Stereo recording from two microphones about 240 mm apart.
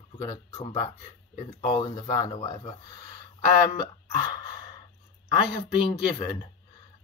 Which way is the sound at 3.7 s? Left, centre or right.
Centre.